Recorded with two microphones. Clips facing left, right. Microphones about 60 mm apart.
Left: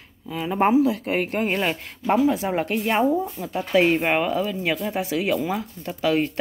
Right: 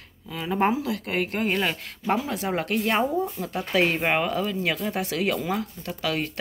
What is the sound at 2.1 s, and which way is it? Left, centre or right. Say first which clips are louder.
Speech: left 9 dB; centre.